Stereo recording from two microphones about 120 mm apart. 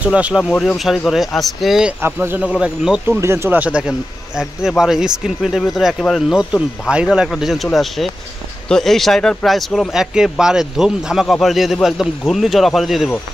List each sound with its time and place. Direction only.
0.0 s speech: 10° right (ahead or behind)
0.4 s speech: 5° left (ahead or behind)
2.0 s speech: 20° right (ahead or behind)
3.1 s speech: 20° right (ahead or behind); by 13.1 s centre (ahead or behind)